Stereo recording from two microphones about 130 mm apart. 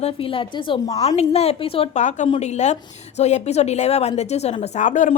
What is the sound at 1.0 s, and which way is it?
Speech, 55° left (ahead or behind).